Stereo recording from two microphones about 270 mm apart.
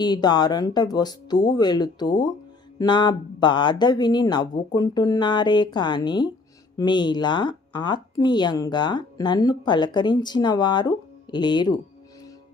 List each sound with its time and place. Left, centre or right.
0.0 s speech: centre